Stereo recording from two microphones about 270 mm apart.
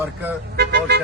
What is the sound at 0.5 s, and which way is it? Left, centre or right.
Speech, right.